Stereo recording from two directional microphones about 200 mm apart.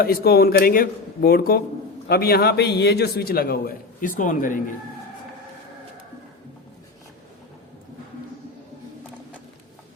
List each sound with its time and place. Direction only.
0.0 s a man's voice: 50° left (ahead or behind)